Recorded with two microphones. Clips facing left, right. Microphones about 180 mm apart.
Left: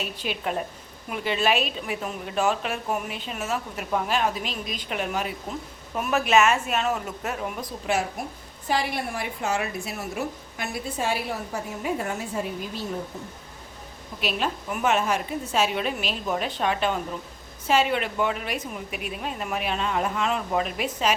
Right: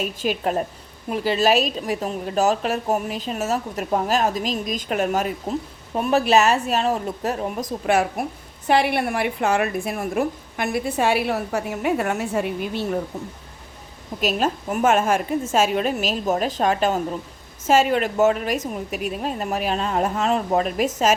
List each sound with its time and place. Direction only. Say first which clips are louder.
0.0 s speech: right 6 dB; 45° right (ahead or behind)
5.9 s speech: right 4 dB; 30° right (ahead or behind)
7.9 s a woman's voice: right 6 dB; 60° right (ahead or behind)
14.2 s a woman's voice: right 6 dB; 45° right (ahead or behind)